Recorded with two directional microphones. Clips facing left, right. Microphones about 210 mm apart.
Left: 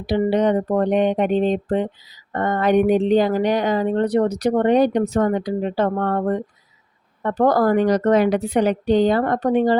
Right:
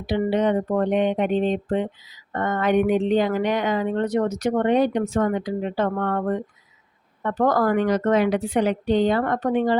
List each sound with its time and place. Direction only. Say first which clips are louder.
0.0 s speech: left 3 dB; 40° left (ahead or behind)